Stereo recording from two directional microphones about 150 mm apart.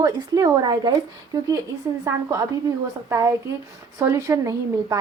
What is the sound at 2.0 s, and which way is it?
A woman's voice, 20° right (ahead or behind).